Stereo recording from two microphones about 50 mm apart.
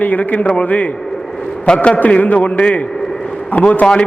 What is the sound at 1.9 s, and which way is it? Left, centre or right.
A man's voice, left.